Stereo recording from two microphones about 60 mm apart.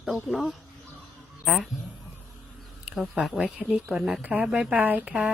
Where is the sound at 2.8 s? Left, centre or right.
Centre.